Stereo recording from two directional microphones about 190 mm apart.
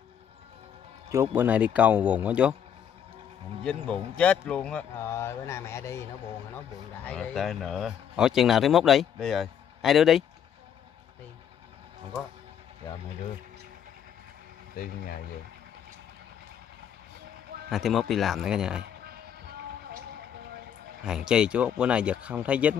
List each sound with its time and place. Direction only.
1.1 s speech: 15° right (ahead or behind)
3.6 s speech: 5° left (ahead or behind)
7.1 s speech: centre (ahead or behind)
14.8 s speech: 50° left (ahead or behind)
17.6 s speech: centre (ahead or behind)
21.0 s speech: 5° right (ahead or behind)